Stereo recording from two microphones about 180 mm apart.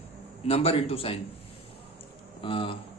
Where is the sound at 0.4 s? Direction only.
30° left (ahead or behind).